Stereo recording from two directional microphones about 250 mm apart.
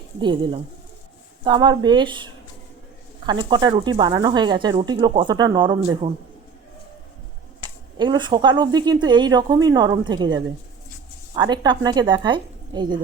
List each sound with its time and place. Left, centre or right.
0.2 s speech: centre
7.9 s speech: centre